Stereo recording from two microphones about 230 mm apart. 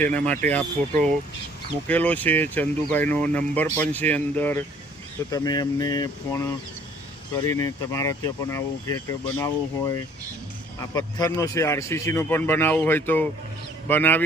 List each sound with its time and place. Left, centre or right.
0.0 s speech: centre
10.8 s speech: centre